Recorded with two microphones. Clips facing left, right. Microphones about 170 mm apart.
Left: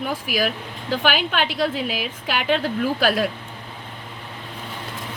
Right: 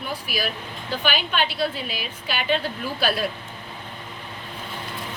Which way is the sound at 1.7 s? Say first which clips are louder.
Left 6 dB; 90° left.